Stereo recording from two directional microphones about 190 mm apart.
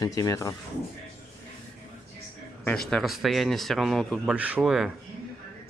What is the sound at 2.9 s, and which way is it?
A man's voice, centre (ahead or behind).